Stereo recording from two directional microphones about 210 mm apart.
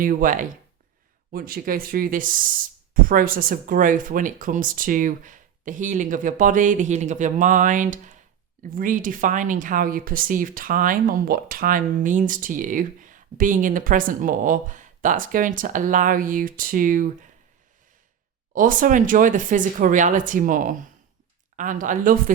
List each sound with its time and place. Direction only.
0.0 s speech: 40° right (ahead or behind)
18.5 s speech: 40° right (ahead or behind)